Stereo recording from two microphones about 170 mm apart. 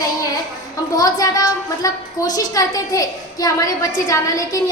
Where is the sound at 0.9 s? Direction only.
20° left (ahead or behind).